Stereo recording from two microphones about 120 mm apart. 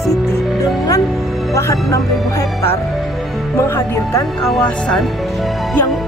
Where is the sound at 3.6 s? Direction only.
20° left (ahead or behind).